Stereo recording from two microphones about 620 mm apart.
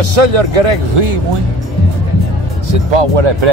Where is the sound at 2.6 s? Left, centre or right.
Right.